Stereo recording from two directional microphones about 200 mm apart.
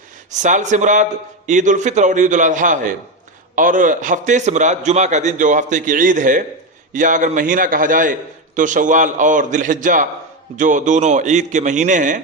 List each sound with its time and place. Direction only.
0.3 s a man's voice: 40° right (ahead or behind)